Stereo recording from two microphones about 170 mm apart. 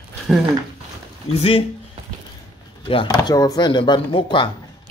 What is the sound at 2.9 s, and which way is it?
Speech, 30° left (ahead or behind).